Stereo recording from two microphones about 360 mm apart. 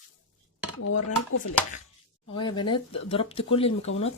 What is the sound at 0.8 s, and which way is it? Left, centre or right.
Speech, left.